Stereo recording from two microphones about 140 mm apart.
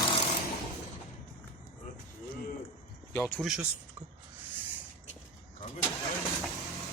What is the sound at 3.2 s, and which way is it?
Speech, 15° left (ahead or behind).